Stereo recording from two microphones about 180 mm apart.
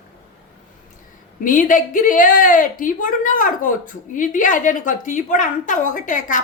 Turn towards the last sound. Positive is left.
turn(degrees=45)  # may be behind; listen again after turning